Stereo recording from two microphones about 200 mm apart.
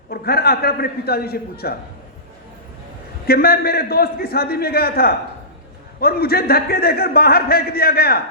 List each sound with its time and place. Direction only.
0.1 s a man's voice: 50° left (ahead or behind)
3.2 s a man's voice: 50° left (ahead or behind)